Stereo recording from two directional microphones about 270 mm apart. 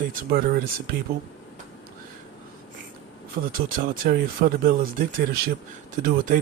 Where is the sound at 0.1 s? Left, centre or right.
Right.